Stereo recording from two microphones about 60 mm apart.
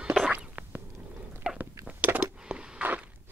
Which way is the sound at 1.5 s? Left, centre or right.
Centre.